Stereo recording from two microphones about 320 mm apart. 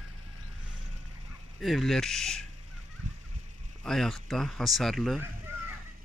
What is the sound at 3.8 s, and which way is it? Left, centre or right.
Speech, centre.